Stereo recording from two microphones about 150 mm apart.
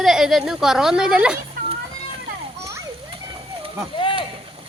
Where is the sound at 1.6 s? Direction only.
70° right (ahead or behind).